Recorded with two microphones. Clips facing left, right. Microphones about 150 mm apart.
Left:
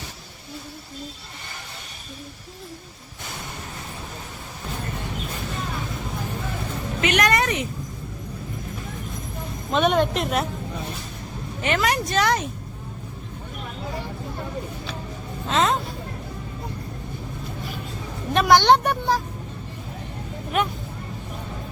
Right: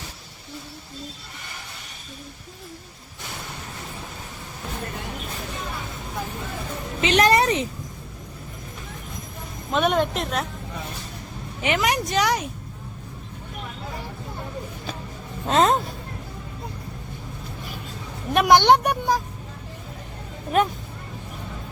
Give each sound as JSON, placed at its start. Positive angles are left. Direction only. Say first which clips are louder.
{"t": 7.0, "sound": "speech", "louder": "right 3 dB", "side_deg": -30}
{"t": 9.7, "sound": "a woman's voice", "louder": "left 1 dB", "side_deg": 0}
{"t": 11.6, "sound": "speech", "louder": "even", "side_deg": -15}
{"t": 15.4, "sound": "speech", "louder": "right 3 dB", "side_deg": -40}
{"t": 18.3, "sound": "speech", "louder": "even", "side_deg": -15}